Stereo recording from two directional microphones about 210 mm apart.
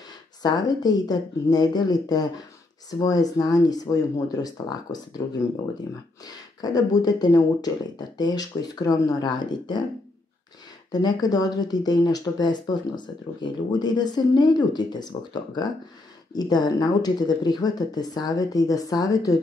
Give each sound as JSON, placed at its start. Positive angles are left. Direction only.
{"t": 0.4, "sound": "speech", "side_deg": 20}
{"t": 6.2, "sound": "speech", "side_deg": 20}
{"t": 10.9, "sound": "speech", "side_deg": 20}